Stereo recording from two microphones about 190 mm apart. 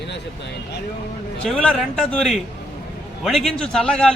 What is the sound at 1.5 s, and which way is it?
A man's voice, 5° left (ahead or behind).